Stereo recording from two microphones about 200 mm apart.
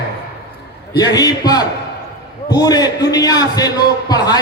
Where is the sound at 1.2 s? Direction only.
20° left (ahead or behind).